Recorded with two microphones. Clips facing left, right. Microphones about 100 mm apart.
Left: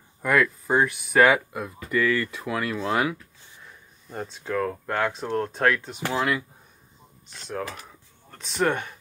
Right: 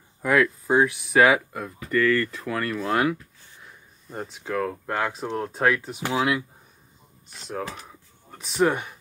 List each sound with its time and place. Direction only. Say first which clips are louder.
0.2 s speech: right 1 dB; centre (ahead or behind)
8.3 s speech: right 2 dB; 10° right (ahead or behind)